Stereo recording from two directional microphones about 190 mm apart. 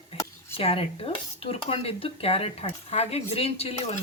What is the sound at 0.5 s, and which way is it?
Dishes, 30° left (ahead or behind).